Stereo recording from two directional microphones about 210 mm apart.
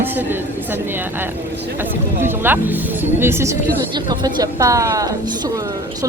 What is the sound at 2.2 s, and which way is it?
A woman's voice, 10° right (ahead or behind).